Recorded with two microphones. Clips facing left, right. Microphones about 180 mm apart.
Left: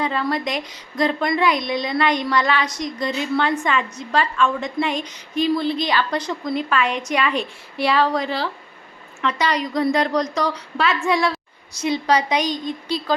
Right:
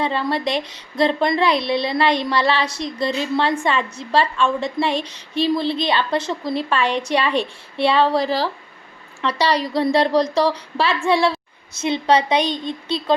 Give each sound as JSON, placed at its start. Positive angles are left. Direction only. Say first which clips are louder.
{"t": 0.0, "sound": "a woman's voice", "louder": "right 1 dB", "side_deg": -30}